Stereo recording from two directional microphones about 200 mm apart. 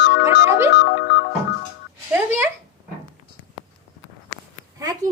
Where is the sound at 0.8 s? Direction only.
55° left (ahead or behind).